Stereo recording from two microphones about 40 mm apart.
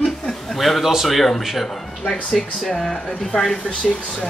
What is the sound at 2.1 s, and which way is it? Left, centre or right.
Speech, centre.